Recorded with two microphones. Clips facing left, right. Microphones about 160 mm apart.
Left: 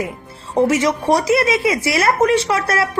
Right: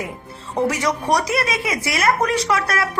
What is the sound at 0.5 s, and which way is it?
A woman's voice, 25° left (ahead or behind).